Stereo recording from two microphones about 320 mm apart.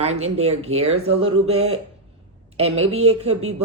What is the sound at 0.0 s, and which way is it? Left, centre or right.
Speech, centre.